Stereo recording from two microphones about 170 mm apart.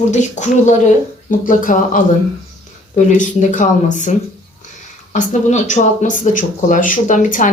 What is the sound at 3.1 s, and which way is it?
Speech, 45° left (ahead or behind).